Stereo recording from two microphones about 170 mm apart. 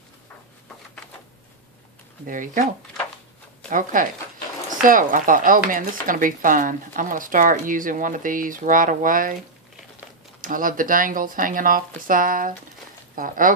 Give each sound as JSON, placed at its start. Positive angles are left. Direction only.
{"t": 2.2, "sound": "speech", "side_deg": -50}
{"t": 3.7, "sound": "speech", "side_deg": -50}
{"t": 10.4, "sound": "speech", "side_deg": -55}